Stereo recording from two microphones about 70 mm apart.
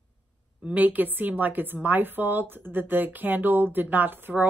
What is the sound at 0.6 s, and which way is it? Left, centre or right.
A woman's voice, right.